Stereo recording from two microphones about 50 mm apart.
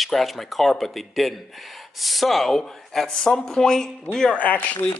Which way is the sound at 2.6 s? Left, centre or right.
Centre.